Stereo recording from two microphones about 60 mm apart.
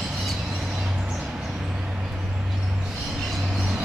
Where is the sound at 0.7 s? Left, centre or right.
Centre.